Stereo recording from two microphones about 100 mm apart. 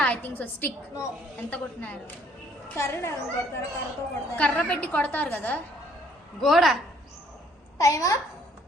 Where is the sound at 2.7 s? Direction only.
25° left (ahead or behind).